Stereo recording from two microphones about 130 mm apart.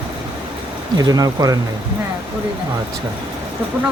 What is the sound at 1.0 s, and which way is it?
Speech, 30° right (ahead or behind).